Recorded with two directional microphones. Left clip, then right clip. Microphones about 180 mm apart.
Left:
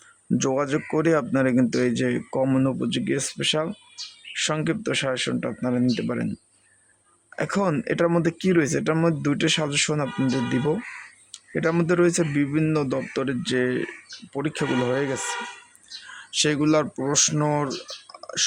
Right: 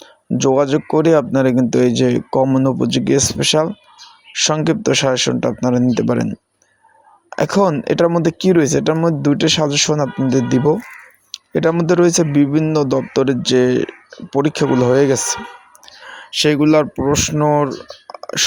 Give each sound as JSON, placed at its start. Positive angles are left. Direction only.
{"t": 0.0, "sound": "speech", "side_deg": -20}
{"t": 7.3, "sound": "speech", "side_deg": -25}